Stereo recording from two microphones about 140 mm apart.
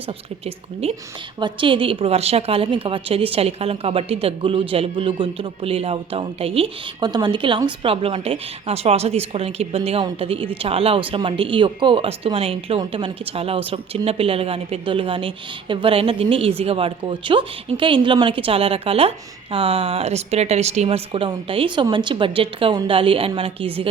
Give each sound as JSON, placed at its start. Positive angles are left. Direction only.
{"t": 0.4, "sound": "a woman's voice", "side_deg": -45}
{"t": 1.4, "sound": "a woman's voice", "side_deg": -35}
{"t": 7.0, "sound": "a woman's voice", "side_deg": -30}